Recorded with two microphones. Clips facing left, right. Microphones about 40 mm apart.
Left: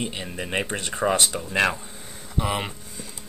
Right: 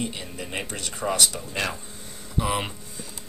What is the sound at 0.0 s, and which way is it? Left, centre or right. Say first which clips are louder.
Speech: left 2 dB; left.